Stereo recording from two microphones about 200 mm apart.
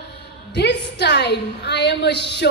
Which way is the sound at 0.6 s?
60° left (ahead or behind).